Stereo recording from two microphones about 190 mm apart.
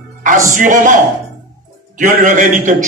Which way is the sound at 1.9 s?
40° right (ahead or behind).